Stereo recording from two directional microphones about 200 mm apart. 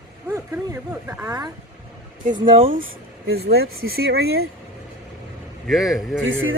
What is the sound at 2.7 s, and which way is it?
Speech, 50° right (ahead or behind).